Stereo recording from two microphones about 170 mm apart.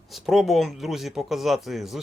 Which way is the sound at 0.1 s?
Centre (ahead or behind).